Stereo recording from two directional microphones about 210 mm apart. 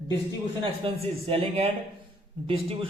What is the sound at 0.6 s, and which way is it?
A man's voice, 25° right (ahead or behind).